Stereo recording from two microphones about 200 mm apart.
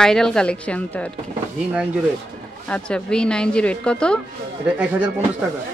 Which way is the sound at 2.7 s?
5° left (ahead or behind).